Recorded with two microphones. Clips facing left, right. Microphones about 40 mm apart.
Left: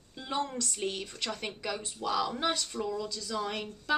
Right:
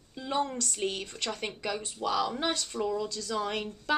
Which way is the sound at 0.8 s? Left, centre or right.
Centre.